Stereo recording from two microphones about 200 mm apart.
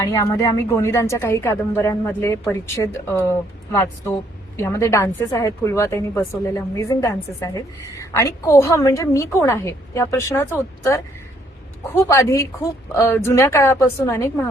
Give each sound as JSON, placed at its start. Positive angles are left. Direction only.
{"t": 0.0, "sound": "a woman's voice", "side_deg": 15}